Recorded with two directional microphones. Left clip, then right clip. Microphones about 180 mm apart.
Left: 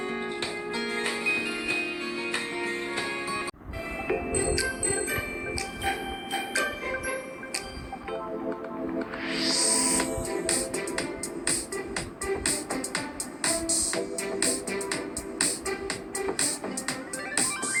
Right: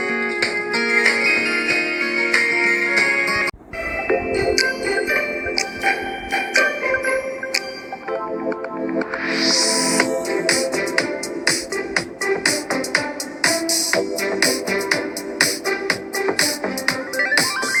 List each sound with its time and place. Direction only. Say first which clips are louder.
0.0 s music: right 11 dB; 30° right (ahead or behind)
9.0 s music: right 10 dB; 35° right (ahead or behind)